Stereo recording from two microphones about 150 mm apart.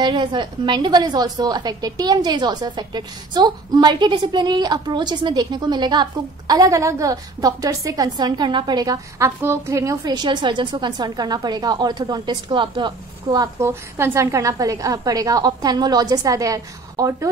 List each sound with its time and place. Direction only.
0.0 s a woman's voice: 30° right (ahead or behind)